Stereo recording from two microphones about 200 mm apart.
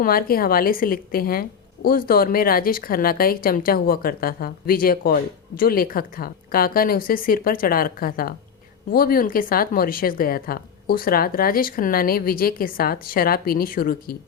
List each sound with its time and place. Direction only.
0.0 s a woman's voice: 45° left (ahead or behind)